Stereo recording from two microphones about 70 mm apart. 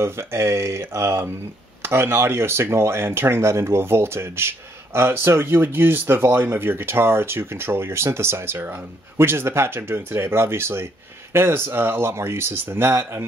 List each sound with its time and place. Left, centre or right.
0.0 s speech: right